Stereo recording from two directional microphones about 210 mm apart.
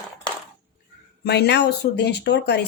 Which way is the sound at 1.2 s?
55° left (ahead or behind).